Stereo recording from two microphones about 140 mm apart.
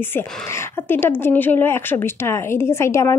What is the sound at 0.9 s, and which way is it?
A woman's voice, 15° left (ahead or behind).